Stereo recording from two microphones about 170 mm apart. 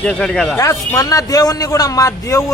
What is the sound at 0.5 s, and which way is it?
A man's voice, 20° left (ahead or behind).